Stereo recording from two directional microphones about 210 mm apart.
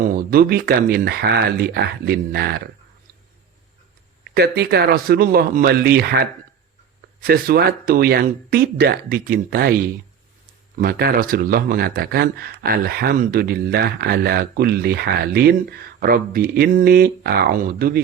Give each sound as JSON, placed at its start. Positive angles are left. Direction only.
{"t": 0.0, "sound": "speech", "side_deg": -45}
{"t": 4.2, "sound": "speech", "side_deg": -50}
{"t": 7.2, "sound": "speech", "side_deg": -45}
{"t": 10.8, "sound": "speech", "side_deg": -45}